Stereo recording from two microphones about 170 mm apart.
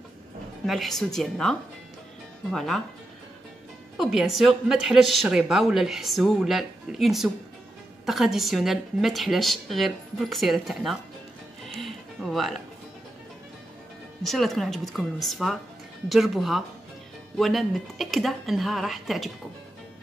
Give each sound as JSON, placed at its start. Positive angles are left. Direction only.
{"t": 0.7, "sound": "speech", "side_deg": 0}
{"t": 3.9, "sound": "speech", "side_deg": 0}
{"t": 11.6, "sound": "music", "side_deg": 0}
{"t": 14.2, "sound": "speech", "side_deg": 0}